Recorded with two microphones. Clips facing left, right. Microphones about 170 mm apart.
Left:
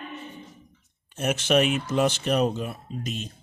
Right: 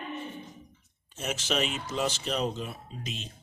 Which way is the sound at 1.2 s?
60° left (ahead or behind).